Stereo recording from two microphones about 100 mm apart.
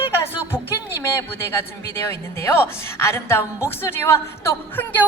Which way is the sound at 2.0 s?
25° left (ahead or behind).